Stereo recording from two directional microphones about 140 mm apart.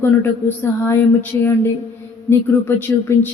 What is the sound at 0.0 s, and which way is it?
Speech, 15° left (ahead or behind).